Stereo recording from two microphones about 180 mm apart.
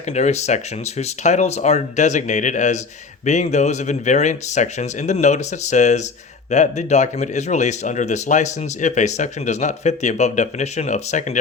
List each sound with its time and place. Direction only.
0.1 s speech: 40° left (ahead or behind)